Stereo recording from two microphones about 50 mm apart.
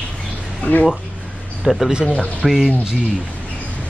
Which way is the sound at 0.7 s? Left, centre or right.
Left.